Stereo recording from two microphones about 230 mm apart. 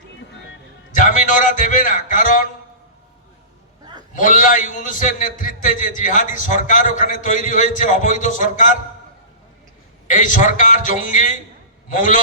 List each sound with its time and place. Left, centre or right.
0.9 s a man's voice: left
4.1 s a man's voice: left
10.1 s a man's voice: left